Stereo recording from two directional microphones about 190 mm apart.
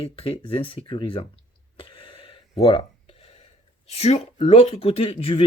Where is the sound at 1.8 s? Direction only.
25° left (ahead or behind).